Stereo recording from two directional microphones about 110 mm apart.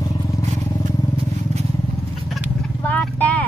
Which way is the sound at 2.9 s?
15° left (ahead or behind).